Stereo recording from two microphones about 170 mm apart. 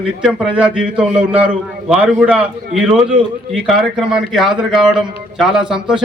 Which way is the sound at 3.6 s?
5° right (ahead or behind).